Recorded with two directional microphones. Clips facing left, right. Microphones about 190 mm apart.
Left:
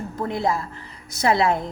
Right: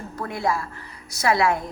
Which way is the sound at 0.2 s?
20° left (ahead or behind).